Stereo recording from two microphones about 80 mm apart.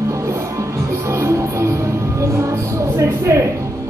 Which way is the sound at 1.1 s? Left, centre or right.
Right.